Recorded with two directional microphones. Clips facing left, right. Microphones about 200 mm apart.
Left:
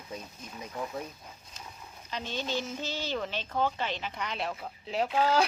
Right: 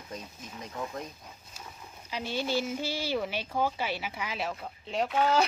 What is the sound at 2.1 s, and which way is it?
Speech, 10° right (ahead or behind).